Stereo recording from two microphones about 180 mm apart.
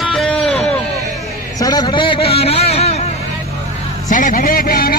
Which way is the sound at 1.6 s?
20° left (ahead or behind).